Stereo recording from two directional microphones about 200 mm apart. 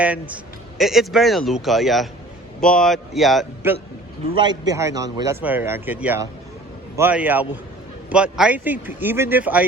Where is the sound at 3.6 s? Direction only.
10° right (ahead or behind).